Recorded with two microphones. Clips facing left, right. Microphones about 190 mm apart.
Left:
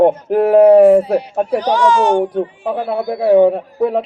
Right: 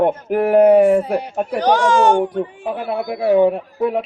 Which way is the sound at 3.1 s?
30° left (ahead or behind).